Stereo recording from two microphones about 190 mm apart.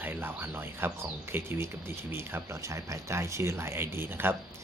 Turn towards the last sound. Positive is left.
turn(degrees=-10)  # may be behind; listen again after turning